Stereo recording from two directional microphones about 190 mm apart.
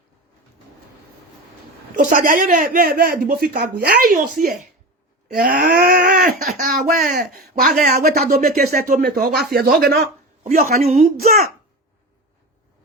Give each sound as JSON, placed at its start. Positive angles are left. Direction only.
{"t": 2.0, "sound": "speech", "side_deg": -45}
{"t": 5.3, "sound": "groan", "side_deg": -50}
{"t": 6.4, "sound": "speech", "side_deg": -45}
{"t": 10.8, "sound": "a woman's voice", "side_deg": -35}